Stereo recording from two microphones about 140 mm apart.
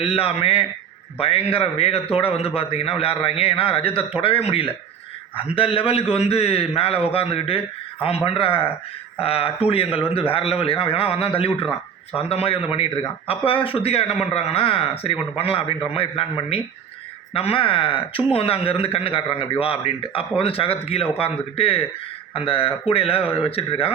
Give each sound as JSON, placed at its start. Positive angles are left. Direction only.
{"t": 0.0, "sound": "a man's voice", "side_deg": 45}